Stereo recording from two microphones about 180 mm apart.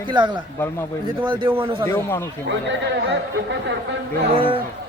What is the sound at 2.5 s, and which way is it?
Speech, 80° right.